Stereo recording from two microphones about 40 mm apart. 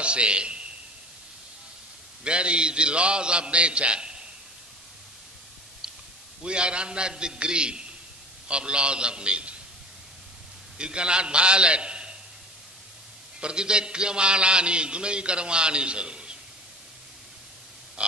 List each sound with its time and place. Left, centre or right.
0.0 s a man's voice: right
2.2 s a man's voice: right
6.4 s a man's voice: right
10.8 s a man's voice: right
13.4 s a man's voice: right